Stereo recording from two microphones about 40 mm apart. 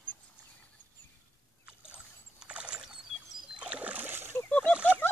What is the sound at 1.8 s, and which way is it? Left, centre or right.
Rowboat, right.